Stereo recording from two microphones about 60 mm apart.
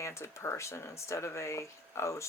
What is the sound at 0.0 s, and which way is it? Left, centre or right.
Speech, left.